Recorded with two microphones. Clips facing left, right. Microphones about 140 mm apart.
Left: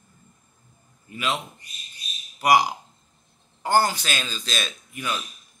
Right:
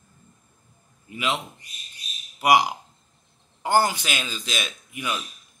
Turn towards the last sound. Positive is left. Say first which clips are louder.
# even
turn(degrees=-15)  # may be behind; listen again after turning